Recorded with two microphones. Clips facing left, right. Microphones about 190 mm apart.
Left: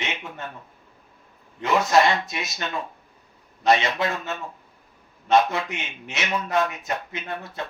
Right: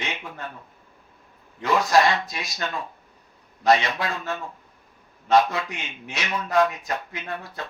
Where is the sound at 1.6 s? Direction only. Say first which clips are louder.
Even; 25° left (ahead or behind).